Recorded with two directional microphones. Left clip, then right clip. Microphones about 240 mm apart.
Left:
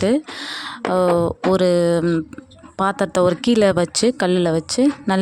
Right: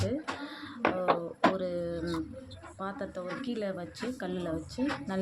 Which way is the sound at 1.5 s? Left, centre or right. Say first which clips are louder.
Left 18 dB; left.